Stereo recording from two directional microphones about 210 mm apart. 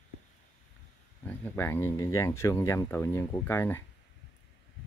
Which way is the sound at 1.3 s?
10° left (ahead or behind).